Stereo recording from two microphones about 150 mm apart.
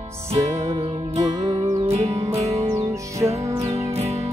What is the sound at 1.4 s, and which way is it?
Music, 25° right (ahead or behind).